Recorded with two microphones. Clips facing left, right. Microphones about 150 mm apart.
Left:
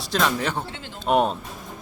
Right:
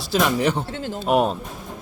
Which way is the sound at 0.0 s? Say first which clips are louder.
Right 4 dB; 5° right (ahead or behind).